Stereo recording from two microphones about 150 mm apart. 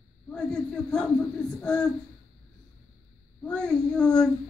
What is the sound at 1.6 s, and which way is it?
Speech, 5° left (ahead or behind).